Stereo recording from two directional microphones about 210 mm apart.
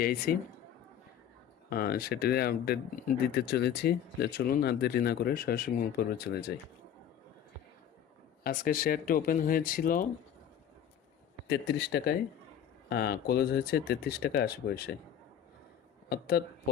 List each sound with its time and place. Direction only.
0.0 s speech: 45° left (ahead or behind)
1.7 s speech: 45° left (ahead or behind)
8.4 s speech: 45° left (ahead or behind)
11.4 s speech: 55° left (ahead or behind)
16.0 s speech: 45° left (ahead or behind)